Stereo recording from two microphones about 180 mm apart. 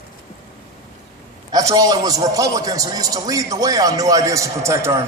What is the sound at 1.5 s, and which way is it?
A man's voice, 20° right (ahead or behind).